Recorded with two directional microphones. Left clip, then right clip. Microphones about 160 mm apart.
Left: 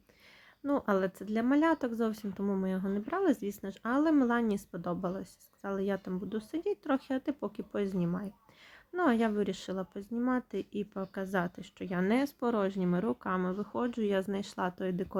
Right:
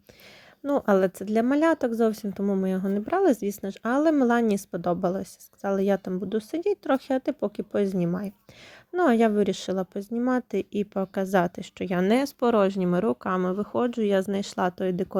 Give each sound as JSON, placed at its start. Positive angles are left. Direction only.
{"t": 0.6, "sound": "a woman's voice", "side_deg": -45}
{"t": 2.6, "sound": "a woman's voice", "side_deg": -40}